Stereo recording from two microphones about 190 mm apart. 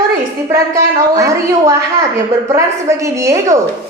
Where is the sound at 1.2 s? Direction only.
15° right (ahead or behind).